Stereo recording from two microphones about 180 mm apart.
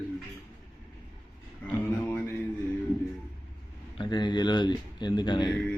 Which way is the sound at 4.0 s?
25° left (ahead or behind).